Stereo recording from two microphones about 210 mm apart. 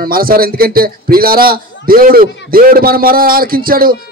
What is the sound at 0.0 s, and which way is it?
A man's voice, 45° right (ahead or behind).